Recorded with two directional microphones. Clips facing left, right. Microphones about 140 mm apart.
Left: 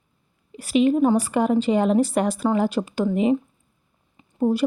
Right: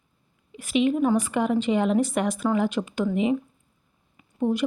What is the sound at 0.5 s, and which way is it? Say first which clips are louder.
A woman's voice: left 4 dB; 35° left (ahead or behind).